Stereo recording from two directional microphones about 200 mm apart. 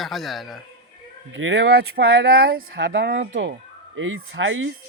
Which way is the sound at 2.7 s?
70° right (ahead or behind).